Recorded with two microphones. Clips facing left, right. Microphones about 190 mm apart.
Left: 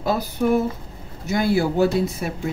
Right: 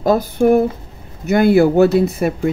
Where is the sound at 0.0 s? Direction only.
45° right (ahead or behind).